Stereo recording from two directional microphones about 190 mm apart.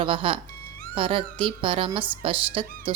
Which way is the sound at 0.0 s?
25° right (ahead or behind).